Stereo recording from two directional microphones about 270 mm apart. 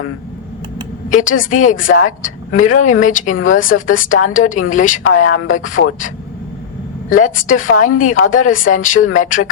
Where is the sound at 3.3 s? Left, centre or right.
Left.